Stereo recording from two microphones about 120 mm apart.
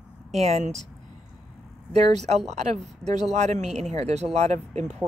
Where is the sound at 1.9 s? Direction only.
70° right (ahead or behind).